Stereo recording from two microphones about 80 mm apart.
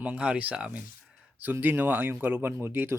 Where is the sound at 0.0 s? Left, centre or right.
Centre.